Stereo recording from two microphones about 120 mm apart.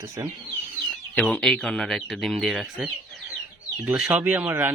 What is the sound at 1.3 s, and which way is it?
Speech, 10° left (ahead or behind).